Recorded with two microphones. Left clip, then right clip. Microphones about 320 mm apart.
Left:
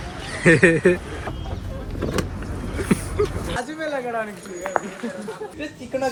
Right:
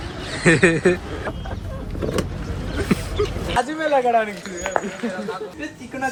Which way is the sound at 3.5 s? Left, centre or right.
Right.